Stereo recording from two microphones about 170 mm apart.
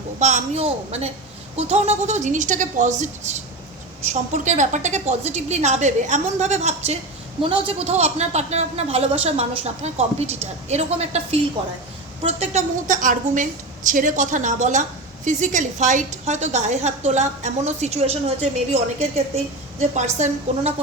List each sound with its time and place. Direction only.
0.2 s a woman's voice: 40° right (ahead or behind)